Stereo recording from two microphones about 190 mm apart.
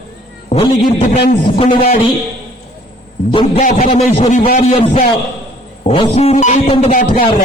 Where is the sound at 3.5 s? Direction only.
40° left (ahead or behind).